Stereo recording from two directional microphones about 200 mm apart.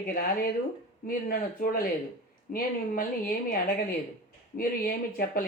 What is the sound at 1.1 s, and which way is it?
A man's voice, 45° left (ahead or behind).